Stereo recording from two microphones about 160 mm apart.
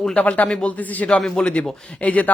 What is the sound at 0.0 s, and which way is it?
A man's voice, 5° left (ahead or behind).